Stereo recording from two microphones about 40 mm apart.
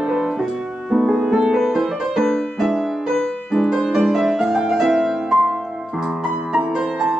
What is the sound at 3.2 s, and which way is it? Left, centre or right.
Music, centre.